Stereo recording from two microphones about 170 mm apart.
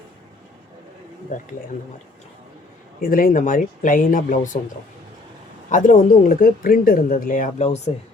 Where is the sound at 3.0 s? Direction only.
55° left (ahead or behind).